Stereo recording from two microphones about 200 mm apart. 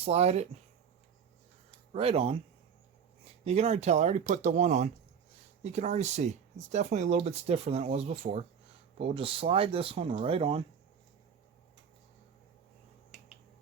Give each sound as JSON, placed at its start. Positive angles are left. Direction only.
{"t": 0.0, "sound": "speech", "side_deg": -30}
{"t": 1.9, "sound": "speech", "side_deg": -30}
{"t": 3.4, "sound": "speech", "side_deg": -30}
{"t": 13.1, "sound": "finger snapping", "side_deg": 0}